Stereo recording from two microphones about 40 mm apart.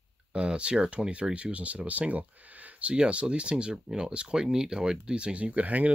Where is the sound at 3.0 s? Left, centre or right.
Right.